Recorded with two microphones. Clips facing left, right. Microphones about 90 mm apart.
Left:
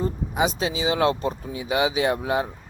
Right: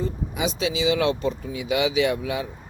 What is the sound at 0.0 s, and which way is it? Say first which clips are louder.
Speech: left 3 dB; 40° left (ahead or behind).